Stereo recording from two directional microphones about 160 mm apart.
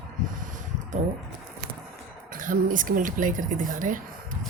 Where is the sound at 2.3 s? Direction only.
55° right (ahead or behind).